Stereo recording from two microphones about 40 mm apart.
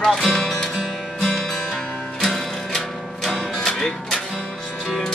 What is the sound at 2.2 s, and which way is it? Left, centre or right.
Music, centre.